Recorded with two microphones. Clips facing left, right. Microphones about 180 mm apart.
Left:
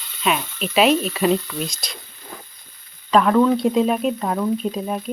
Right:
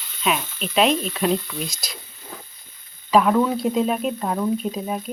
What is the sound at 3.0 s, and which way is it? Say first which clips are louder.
Speech: left 2 dB; 5° right (ahead or behind).